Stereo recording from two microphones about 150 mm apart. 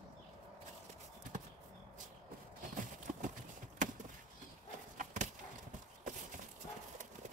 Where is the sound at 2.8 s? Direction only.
55° right (ahead or behind).